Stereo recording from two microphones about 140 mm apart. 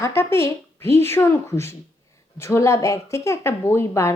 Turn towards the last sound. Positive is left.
turn(degrees=20)  # may be behind; listen again after turning